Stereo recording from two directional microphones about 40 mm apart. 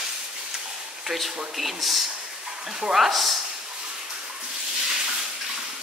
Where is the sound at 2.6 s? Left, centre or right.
Centre.